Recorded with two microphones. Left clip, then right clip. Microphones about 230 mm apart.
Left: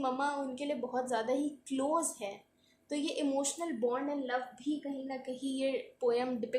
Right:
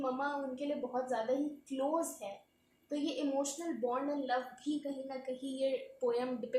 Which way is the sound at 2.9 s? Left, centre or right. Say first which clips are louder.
Left 2 dB; left.